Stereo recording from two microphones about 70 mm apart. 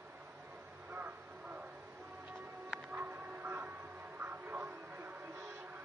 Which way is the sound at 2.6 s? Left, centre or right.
Centre.